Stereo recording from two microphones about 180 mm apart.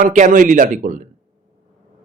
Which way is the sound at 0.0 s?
45° right (ahead or behind).